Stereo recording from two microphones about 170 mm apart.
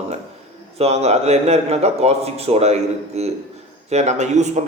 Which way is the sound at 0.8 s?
40° right (ahead or behind).